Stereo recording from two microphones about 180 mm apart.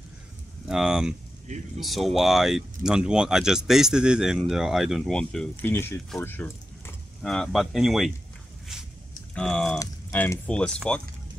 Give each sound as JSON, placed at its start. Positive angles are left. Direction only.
{"t": 0.7, "sound": "speech", "side_deg": -5}
{"t": 9.3, "sound": "speech", "side_deg": 5}